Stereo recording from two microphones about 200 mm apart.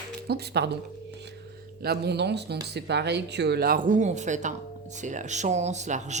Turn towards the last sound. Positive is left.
turn(degrees=-35)  # may be behind; listen again after turning